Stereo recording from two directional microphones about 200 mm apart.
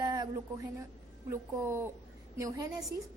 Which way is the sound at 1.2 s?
10° right (ahead or behind).